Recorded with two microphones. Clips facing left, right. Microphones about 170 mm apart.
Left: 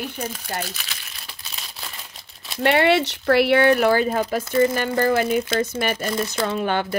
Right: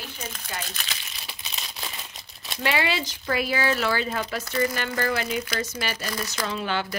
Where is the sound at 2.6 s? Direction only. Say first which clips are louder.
Left 8 dB; 60° left (ahead or behind).